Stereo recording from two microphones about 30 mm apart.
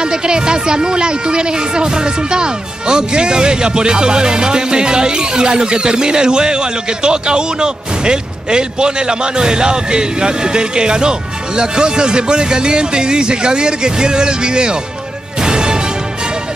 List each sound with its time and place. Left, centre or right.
0.0 s speech: right
15.4 s music: right